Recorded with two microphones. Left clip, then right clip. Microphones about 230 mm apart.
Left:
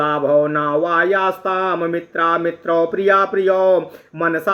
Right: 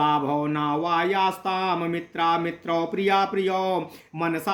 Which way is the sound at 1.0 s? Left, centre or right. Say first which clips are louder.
Left 6 dB; right.